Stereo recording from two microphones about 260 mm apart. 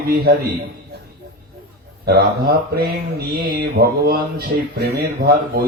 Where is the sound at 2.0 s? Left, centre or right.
Right.